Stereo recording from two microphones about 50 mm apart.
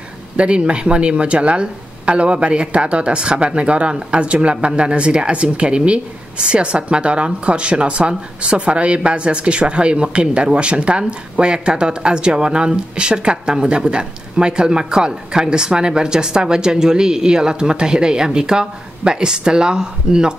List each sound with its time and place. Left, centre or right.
0.4 s speech: right